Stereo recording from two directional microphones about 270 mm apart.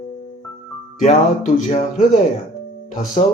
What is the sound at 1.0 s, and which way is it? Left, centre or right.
Speech, left.